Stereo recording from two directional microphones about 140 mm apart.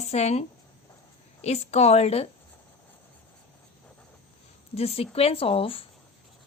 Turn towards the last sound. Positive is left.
turn(degrees=40)  # may be behind; listen again after turning